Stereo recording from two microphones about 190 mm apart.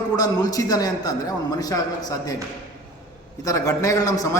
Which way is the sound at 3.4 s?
15° left (ahead or behind).